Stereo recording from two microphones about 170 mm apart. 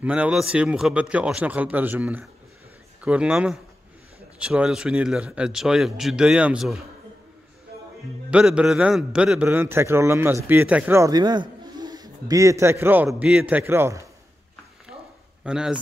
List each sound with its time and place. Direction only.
0.0 s a man's voice: 5° right (ahead or behind)
8.3 s a man's voice: 5° right (ahead or behind)
15.4 s speech: 5° right (ahead or behind)